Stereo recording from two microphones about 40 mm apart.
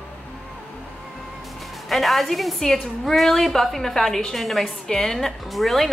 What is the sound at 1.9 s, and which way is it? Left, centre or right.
A woman's voice, centre.